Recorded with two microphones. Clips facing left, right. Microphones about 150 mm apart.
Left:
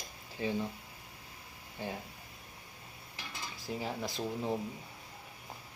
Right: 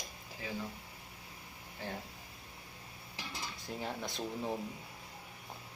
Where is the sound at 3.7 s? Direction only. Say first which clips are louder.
Left 3 dB; centre (ahead or behind).